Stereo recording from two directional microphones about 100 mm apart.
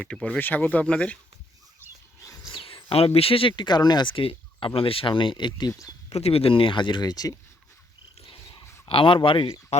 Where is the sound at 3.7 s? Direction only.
45° left (ahead or behind).